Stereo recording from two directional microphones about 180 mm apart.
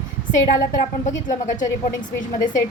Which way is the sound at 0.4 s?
50° left (ahead or behind).